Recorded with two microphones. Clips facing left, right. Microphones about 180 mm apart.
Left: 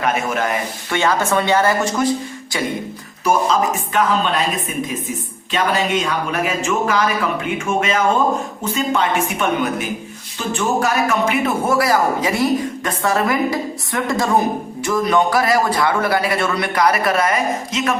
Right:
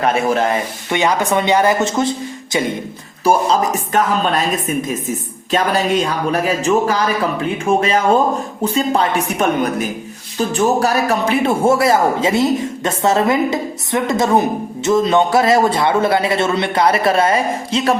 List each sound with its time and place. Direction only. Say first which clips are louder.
0.0 s speech: right 4 dB; 30° right (ahead or behind)
0.9 s a man's voice: right 1 dB; 15° right (ahead or behind)
3.2 s a man's voice: right 2 dB; 35° right (ahead or behind)